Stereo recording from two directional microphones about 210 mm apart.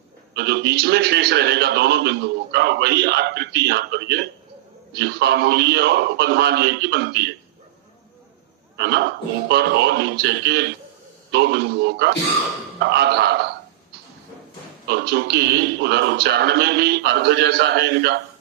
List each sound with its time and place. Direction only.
0.3 s a man's voice: 55° right (ahead or behind)
8.8 s a man's voice: 50° right (ahead or behind)
14.8 s a man's voice: 50° right (ahead or behind)